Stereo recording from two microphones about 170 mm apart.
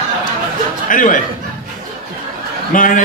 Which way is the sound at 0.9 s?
50° left (ahead or behind).